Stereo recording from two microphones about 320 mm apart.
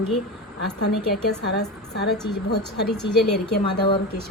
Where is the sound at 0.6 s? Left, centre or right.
Left.